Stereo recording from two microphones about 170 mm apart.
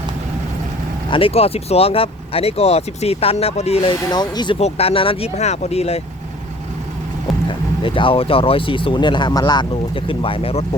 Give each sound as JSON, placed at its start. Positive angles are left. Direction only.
{"t": 1.1, "sound": "speech", "side_deg": 35}
{"t": 4.1, "sound": "speech", "side_deg": 25}
{"t": 4.6, "sound": "speech", "side_deg": 35}
{"t": 7.4, "sound": "speech", "side_deg": 30}